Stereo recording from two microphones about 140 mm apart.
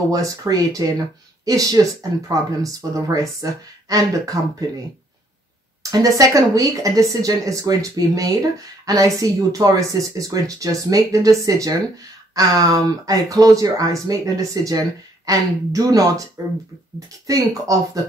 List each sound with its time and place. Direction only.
0.1 s speech: 25° right (ahead or behind)
5.8 s speech: 25° right (ahead or behind)
17.3 s speech: 25° right (ahead or behind)